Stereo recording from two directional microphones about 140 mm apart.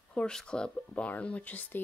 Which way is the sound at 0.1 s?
5° left (ahead or behind).